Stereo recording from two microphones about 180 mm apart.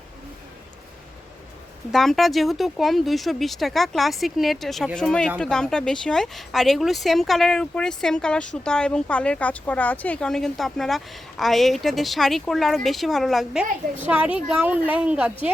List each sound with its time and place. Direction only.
1.9 s a woman's voice: centre (ahead or behind)